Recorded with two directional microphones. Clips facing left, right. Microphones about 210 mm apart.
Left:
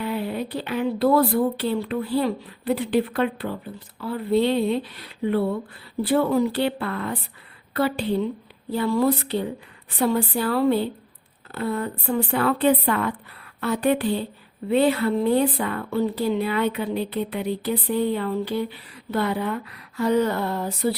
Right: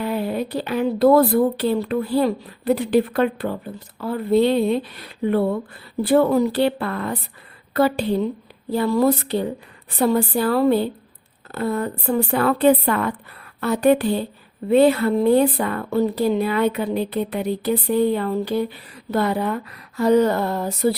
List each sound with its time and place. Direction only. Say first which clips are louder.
0.0 s speech: right 3 dB; 40° right (ahead or behind)
6.0 s a woman's voice: right 4 dB; 45° right (ahead or behind)